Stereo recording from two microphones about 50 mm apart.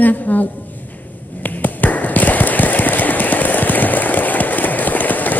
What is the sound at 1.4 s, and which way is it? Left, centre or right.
Tap, left.